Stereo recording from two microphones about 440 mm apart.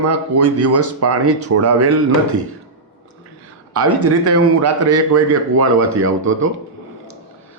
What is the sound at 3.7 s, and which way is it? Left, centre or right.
Speech, right.